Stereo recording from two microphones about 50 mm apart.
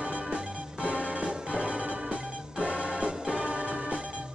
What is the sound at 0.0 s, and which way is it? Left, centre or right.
Music, right.